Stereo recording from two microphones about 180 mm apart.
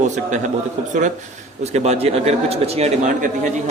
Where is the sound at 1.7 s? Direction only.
35° right (ahead or behind).